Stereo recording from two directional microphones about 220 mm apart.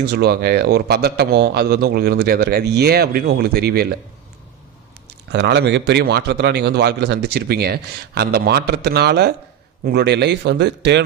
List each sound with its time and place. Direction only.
0.0 s speech: 45° right (ahead or behind)
5.0 s speech: 50° right (ahead or behind)